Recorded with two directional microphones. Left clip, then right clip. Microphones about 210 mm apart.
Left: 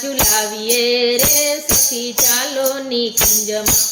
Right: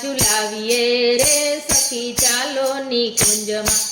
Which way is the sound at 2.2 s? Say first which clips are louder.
Left 1 dB; 5° left (ahead or behind).